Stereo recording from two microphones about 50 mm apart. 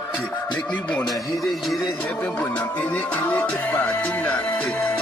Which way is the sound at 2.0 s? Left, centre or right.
Left.